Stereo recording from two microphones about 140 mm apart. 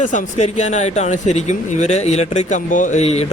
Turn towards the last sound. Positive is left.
turn(degrees=50)  # may be behind; listen again after turning